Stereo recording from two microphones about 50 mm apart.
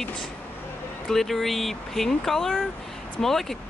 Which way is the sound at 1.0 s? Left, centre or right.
Centre.